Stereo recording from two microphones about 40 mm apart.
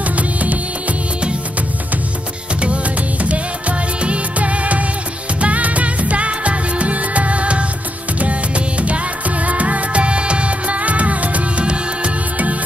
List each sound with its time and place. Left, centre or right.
0.1 s music: right
2.6 s music: right